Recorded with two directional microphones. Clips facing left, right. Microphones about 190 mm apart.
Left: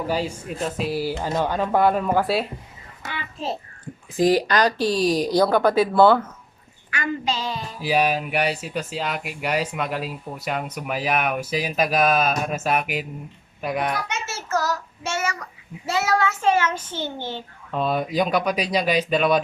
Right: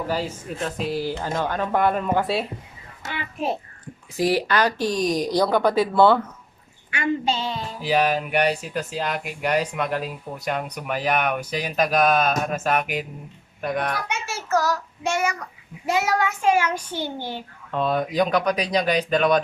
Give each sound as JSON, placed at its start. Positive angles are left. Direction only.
{"t": 0.1, "sound": "speech", "side_deg": 10}
{"t": 3.1, "sound": "a sound", "side_deg": -15}
{"t": 4.4, "sound": "speech", "side_deg": 40}
{"t": 5.2, "sound": "speech", "side_deg": 5}
{"t": 6.9, "sound": "a woman's voice", "side_deg": -25}
{"t": 7.8, "sound": "speech", "side_deg": 10}
{"t": 14.1, "sound": "a child's voice", "side_deg": -10}
{"t": 17.7, "sound": "speech", "side_deg": 10}